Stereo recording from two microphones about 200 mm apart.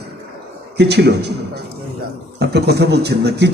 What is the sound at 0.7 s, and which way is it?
Speech, 55° right (ahead or behind).